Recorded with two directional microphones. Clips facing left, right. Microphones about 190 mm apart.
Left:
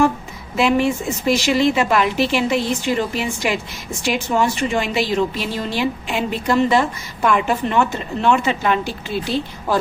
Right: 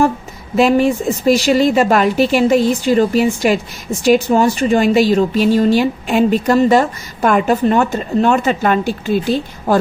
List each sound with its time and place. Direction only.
0.5 s a woman's voice: 40° right (ahead or behind)